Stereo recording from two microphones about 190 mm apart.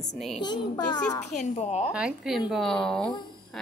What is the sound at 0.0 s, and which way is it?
Speech, centre (ahead or behind).